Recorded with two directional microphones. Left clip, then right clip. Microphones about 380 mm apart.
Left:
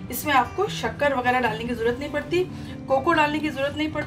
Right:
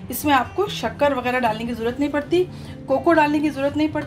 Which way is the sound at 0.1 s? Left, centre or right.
Centre.